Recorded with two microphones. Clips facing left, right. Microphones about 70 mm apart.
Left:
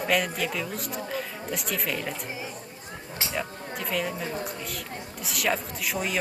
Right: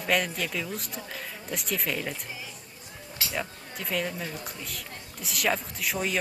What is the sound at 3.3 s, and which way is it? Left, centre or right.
A woman's voice, centre.